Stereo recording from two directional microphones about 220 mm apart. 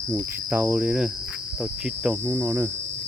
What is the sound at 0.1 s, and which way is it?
Cricket, 10° right (ahead or behind).